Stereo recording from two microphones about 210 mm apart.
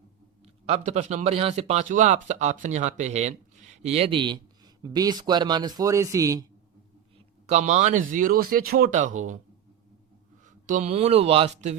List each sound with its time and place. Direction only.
0.4 s speech: 30° right (ahead or behind)
7.4 s speech: 30° right (ahead or behind)
10.4 s speech: 35° right (ahead or behind)